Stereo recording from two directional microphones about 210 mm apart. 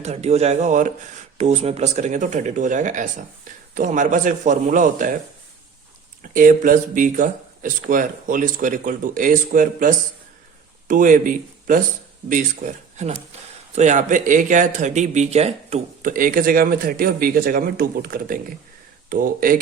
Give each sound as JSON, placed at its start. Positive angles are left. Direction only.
{"t": 0.0, "sound": "speech", "side_deg": -30}
{"t": 6.3, "sound": "speech", "side_deg": -40}